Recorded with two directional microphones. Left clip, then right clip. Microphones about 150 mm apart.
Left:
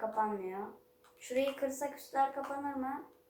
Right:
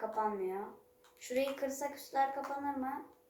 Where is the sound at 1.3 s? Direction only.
30° right (ahead or behind).